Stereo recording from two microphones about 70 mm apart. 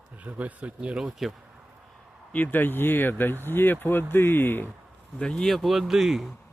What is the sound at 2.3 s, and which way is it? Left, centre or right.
Speech, left.